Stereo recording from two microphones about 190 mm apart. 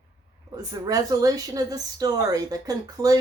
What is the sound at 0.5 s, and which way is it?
Speech, 20° right (ahead or behind).